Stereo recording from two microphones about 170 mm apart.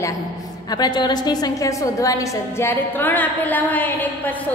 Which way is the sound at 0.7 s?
25° left (ahead or behind).